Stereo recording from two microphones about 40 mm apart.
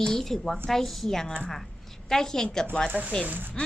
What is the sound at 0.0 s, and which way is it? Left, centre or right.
A woman's voice, centre.